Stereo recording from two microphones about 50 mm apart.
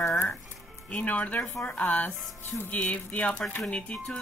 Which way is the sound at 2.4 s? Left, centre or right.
Left.